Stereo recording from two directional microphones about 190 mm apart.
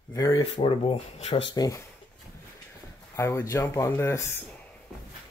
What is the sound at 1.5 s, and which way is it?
Speech, 20° left (ahead or behind).